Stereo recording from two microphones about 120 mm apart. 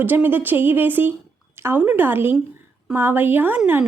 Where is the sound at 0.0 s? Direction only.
15° right (ahead or behind).